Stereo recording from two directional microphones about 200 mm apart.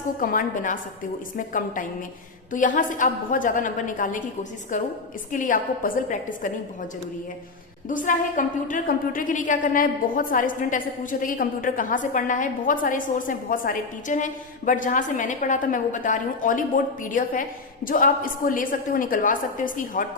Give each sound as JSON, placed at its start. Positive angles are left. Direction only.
{"t": 0.2, "sound": "a woman's voice", "side_deg": 45}
{"t": 7.9, "sound": "a woman's voice", "side_deg": 40}